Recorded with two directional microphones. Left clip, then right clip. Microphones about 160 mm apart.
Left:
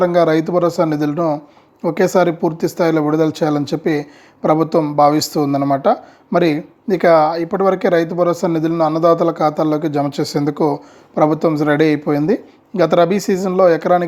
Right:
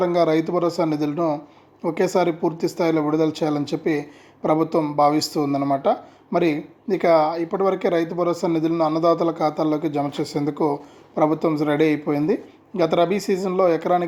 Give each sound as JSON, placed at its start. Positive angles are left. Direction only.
{"t": 0.0, "sound": "speech", "side_deg": 50}